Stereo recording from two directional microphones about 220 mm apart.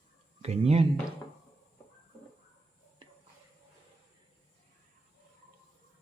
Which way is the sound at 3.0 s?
20° right (ahead or behind).